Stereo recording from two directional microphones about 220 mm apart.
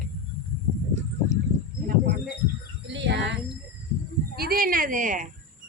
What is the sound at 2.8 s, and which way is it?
Speech, 55° right (ahead or behind).